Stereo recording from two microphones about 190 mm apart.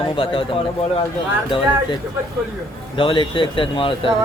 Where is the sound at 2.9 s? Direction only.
25° left (ahead or behind).